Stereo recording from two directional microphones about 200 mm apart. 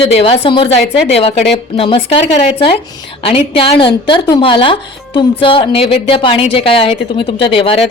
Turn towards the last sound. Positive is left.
turn(degrees=25)  # may be behind; listen again after turning